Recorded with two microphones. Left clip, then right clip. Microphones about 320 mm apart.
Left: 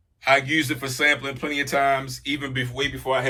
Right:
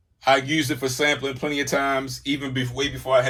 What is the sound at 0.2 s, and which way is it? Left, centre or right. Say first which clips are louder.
Speech: even; centre.